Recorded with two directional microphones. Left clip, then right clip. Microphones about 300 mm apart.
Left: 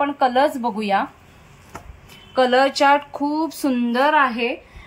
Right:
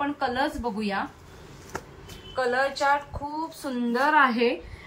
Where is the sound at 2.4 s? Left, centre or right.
Left.